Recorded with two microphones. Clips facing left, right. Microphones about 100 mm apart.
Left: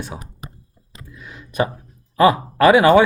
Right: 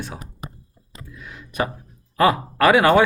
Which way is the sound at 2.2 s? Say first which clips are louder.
Left 3 dB; 20° left (ahead or behind).